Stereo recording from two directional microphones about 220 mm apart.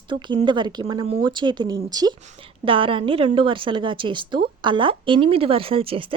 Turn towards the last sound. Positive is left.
turn(degrees=-25)  # may be behind; listen again after turning